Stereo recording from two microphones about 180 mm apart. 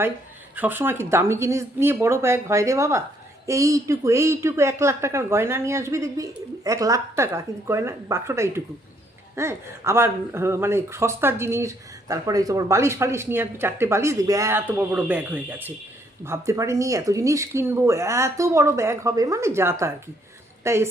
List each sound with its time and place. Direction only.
0.5 s speech: 10° right (ahead or behind)